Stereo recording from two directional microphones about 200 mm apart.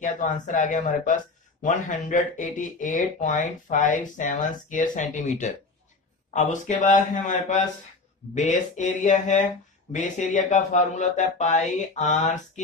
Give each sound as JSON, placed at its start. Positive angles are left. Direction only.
{"t": 0.0, "sound": "speech", "side_deg": 40}